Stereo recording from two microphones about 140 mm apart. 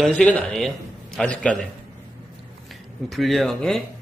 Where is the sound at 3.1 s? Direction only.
Centre (ahead or behind).